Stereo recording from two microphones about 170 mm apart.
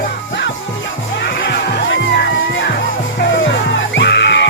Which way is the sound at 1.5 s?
80° left.